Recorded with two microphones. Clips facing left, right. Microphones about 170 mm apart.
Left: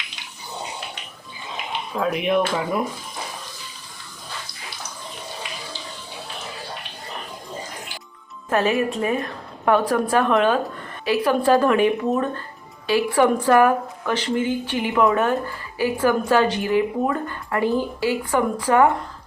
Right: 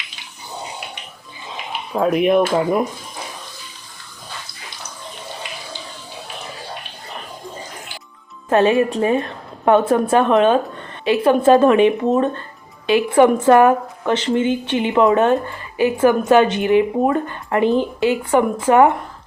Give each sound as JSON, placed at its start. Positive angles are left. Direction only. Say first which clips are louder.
{"t": 2.0, "sound": "speech", "louder": "right 6 dB", "side_deg": -45}
{"t": 8.4, "sound": "a woman's voice", "louder": "right 6 dB", "side_deg": -25}